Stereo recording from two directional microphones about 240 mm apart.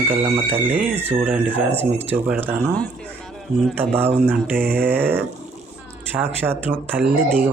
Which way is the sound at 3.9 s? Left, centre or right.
Centre.